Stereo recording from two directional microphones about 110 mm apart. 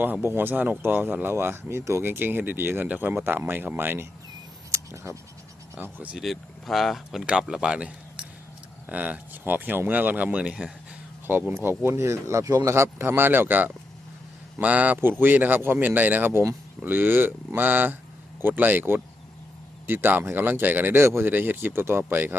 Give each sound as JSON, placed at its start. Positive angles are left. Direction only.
{"t": 0.0, "sound": "speech", "side_deg": -20}
{"t": 4.7, "sound": "a sound", "side_deg": -25}
{"t": 5.7, "sound": "speech", "side_deg": -15}
{"t": 6.2, "sound": "speech", "side_deg": 0}